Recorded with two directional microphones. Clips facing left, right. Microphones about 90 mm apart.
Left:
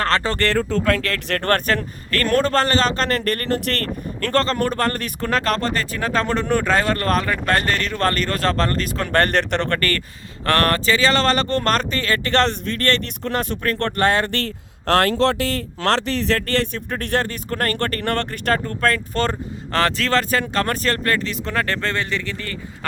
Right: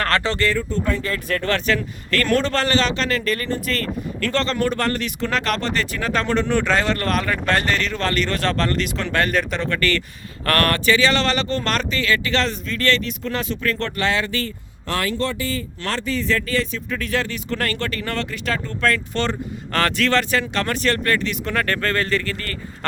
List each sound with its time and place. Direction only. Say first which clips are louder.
0.2 s speech: even; 40° left (ahead or behind)
0.4 s speech: left 3 dB; 70° left (ahead or behind)
4.2 s speech: left 2 dB; 40° left (ahead or behind)
7.4 s speech: even; 45° left (ahead or behind)
10.4 s speech: left 1 dB; 30° left (ahead or behind)
11.4 s speech: left 3 dB; 55° left (ahead or behind)
16.9 s speech: left 1 dB; 55° left (ahead or behind); by 22.9 s 15° left (ahead or behind)